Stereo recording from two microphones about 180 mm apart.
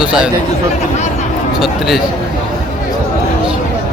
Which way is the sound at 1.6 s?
Centre (ahead or behind).